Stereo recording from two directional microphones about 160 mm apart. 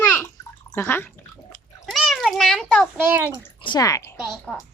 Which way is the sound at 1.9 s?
Centre (ahead or behind).